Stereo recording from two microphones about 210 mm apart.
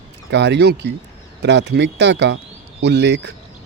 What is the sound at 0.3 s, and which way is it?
Speech, 55° right (ahead or behind).